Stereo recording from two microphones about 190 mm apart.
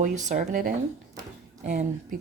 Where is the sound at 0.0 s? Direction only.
40° right (ahead or behind).